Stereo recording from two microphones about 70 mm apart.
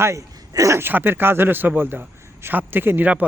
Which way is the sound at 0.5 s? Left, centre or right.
Right.